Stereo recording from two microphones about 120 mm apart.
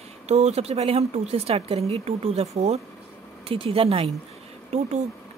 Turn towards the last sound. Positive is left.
turn(degrees=-65)  # may be behind; listen again after turning